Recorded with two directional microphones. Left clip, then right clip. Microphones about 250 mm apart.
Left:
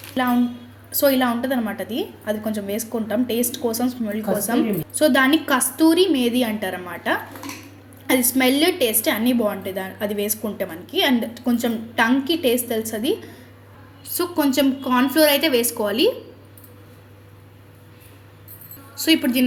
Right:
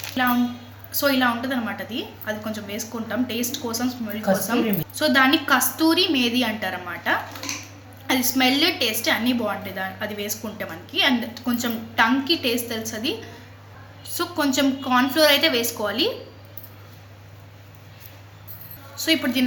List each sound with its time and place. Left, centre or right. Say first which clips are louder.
0.9 s a woman's voice: left 2 dB; centre
14.2 s a woman's voice: left 2 dB; centre
19.0 s a woman's voice: left 3 dB; centre